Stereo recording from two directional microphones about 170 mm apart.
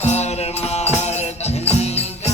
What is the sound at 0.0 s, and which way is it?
Music, 40° left (ahead or behind).